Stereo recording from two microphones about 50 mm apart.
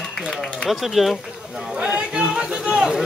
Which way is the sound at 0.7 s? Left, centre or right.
Centre.